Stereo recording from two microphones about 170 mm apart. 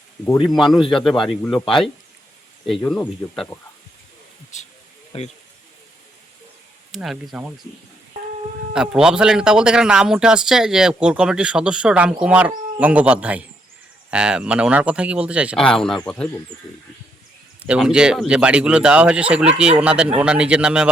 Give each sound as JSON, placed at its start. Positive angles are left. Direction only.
{"t": 0.4, "sound": "a man's voice", "side_deg": 0}
{"t": 2.9, "sound": "a man's voice", "side_deg": 5}
{"t": 5.1, "sound": "speech", "side_deg": 35}
{"t": 6.9, "sound": "a man's voice", "side_deg": 0}
{"t": 8.7, "sound": "a man's voice", "side_deg": -5}
{"t": 15.6, "sound": "a man's voice", "side_deg": 5}
{"t": 17.6, "sound": "a man's voice", "side_deg": -5}